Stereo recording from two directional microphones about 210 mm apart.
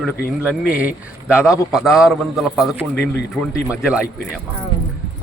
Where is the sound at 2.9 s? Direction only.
55° left (ahead or behind).